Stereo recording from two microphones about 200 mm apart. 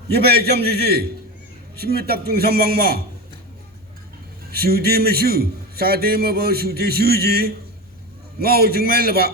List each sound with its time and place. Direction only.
0.1 s a man's voice: 50° right (ahead or behind)
4.5 s a man's voice: 50° right (ahead or behind)